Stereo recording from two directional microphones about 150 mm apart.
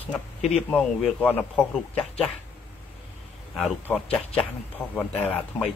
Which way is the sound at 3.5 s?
Centre (ahead or behind).